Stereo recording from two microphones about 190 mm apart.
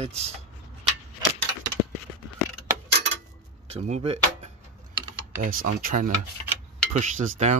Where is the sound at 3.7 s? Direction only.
35° right (ahead or behind).